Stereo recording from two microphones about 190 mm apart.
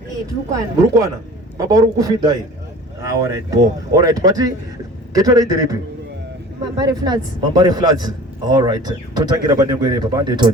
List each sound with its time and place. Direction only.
0.8 s a man's voice: 15° right (ahead or behind)